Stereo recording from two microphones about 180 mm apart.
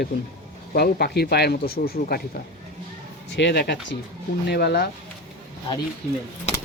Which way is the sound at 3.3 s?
75° left (ahead or behind).